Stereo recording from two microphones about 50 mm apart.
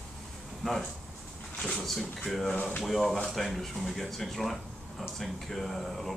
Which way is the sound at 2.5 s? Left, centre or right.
Left.